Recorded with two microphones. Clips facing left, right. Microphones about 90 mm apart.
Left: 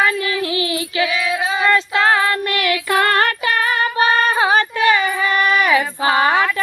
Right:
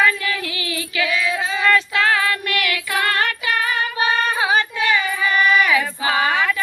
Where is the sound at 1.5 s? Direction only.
25° left (ahead or behind).